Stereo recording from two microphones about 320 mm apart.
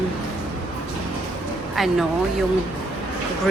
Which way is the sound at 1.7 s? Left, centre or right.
Centre.